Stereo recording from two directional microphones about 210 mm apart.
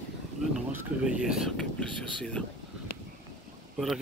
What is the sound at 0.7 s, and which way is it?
Speech, 10° right (ahead or behind).